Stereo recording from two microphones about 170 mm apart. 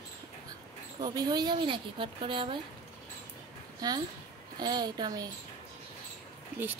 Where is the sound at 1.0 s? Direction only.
25° right (ahead or behind).